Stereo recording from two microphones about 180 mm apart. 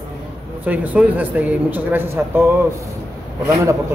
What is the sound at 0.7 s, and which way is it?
Speech, 10° right (ahead or behind).